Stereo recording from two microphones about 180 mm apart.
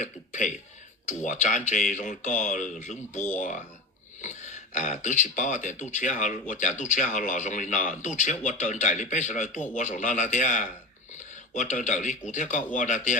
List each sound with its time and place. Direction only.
0.0 s speech: 45° left (ahead or behind)